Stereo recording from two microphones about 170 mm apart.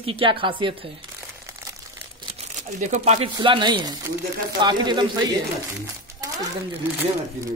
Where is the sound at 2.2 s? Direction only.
35° right (ahead or behind).